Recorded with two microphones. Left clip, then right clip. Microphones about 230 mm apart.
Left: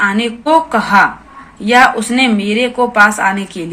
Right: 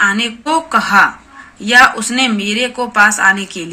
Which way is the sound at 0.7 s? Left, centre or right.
Centre.